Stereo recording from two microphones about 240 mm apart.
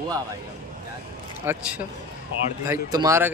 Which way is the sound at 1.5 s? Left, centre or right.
Centre.